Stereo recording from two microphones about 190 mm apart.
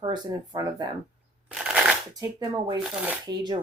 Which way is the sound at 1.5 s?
Centre (ahead or behind).